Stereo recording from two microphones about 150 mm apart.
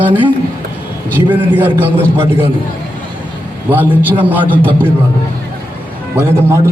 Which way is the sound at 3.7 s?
10° right (ahead or behind).